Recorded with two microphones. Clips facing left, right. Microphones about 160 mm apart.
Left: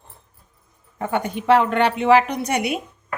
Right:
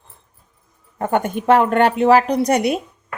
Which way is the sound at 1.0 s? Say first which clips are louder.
Right 4 dB; 50° right (ahead or behind).